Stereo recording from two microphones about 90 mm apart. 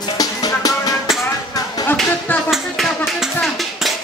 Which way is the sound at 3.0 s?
5° right (ahead or behind).